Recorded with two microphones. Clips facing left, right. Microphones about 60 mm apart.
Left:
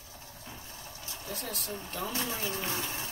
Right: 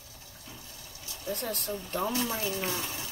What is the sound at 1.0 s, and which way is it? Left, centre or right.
Vehicle, left.